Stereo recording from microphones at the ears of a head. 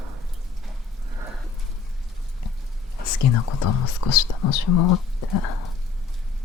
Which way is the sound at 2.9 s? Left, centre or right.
Left.